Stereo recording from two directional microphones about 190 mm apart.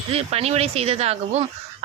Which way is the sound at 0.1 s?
30° right (ahead or behind).